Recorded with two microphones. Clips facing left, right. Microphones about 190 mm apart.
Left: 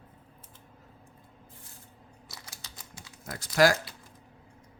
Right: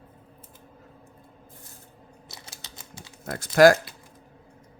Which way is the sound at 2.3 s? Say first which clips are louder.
Right 2 dB; 25° right (ahead or behind).